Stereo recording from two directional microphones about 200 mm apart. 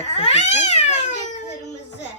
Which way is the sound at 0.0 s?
30° left (ahead or behind).